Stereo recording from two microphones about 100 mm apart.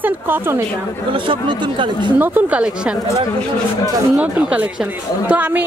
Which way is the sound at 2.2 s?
15° right (ahead or behind).